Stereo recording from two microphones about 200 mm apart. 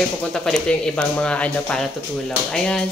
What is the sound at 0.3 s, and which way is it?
Speech, 5° left (ahead or behind).